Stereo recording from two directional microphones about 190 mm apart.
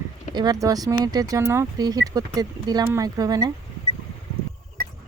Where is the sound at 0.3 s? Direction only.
20° right (ahead or behind).